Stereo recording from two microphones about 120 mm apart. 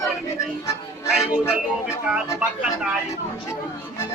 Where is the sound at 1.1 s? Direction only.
5° right (ahead or behind).